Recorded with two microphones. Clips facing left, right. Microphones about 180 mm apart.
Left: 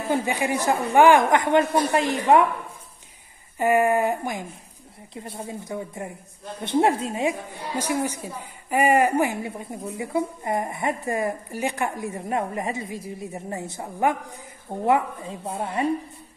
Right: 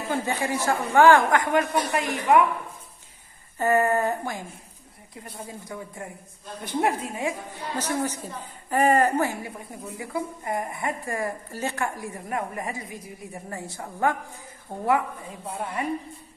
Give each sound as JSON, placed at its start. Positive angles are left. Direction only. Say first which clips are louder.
{"t": 0.1, "sound": "a woman's voice", "louder": "left 3 dB", "side_deg": 15}
{"t": 3.5, "sound": "a woman's voice", "louder": "left 2 dB", "side_deg": 15}
{"t": 7.7, "sound": "a woman's voice", "louder": "left 2 dB", "side_deg": 10}